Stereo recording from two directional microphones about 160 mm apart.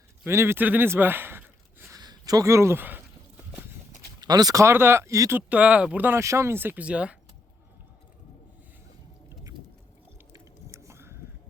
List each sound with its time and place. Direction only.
0.3 s speech: 15° right (ahead or behind)
2.0 s speech: 25° right (ahead or behind)
4.2 s speech: 25° right (ahead or behind)
5.4 s speech: 10° right (ahead or behind)
10.3 s a sound: 15° right (ahead or behind)